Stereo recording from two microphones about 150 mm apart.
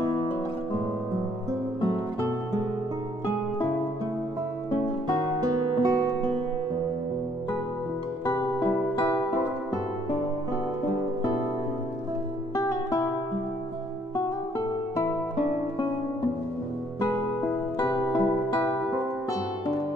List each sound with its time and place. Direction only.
5.2 s music: 25° right (ahead or behind)
12.5 s music: 20° left (ahead or behind)
17.7 s music: 30° left (ahead or behind)